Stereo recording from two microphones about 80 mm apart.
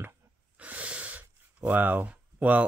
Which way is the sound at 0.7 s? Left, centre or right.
Centre.